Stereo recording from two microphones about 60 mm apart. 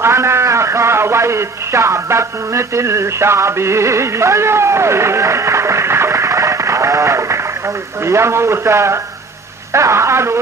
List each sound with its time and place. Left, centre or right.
0.0 s a man's voice: right